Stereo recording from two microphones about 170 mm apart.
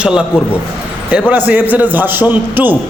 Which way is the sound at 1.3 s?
10° right (ahead or behind).